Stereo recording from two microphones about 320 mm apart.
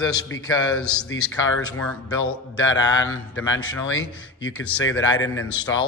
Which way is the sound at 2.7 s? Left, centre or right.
Centre.